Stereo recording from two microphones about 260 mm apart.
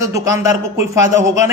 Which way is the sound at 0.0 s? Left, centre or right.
Centre.